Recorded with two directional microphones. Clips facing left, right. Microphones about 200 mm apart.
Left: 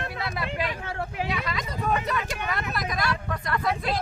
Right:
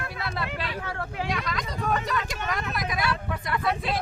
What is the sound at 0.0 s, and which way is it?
Speech, 25° left (ahead or behind).